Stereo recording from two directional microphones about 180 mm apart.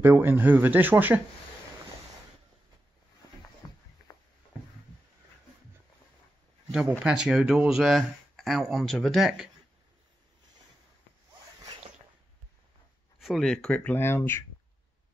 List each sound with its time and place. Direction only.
0.0 s speech: 10° right (ahead or behind)
3.6 s music: 20° left (ahead or behind)
4.1 s a sound: 20° left (ahead or behind)
6.7 s speech: 5° right (ahead or behind)
13.2 s speech: centre (ahead or behind)